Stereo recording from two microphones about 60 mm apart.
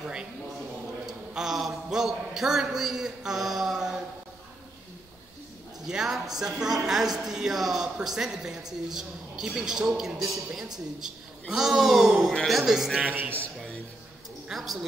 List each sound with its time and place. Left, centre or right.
0.0 s a sound: centre
1.0 s a man's voice: centre
5.9 s a woman's voice: centre
13.0 s a man's voice: right
14.5 s a man's voice: centre